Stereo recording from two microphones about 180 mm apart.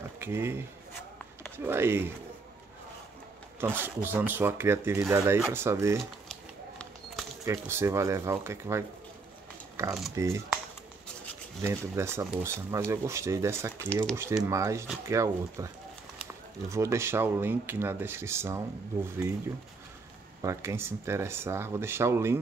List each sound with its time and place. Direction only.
0.2 s speech: 15° right (ahead or behind)
1.7 s speech: 15° right (ahead or behind)
3.6 s speech: 10° right (ahead or behind)
7.4 s speech: 15° right (ahead or behind)
11.6 s speech: 15° right (ahead or behind)
20.4 s speech: 15° right (ahead or behind)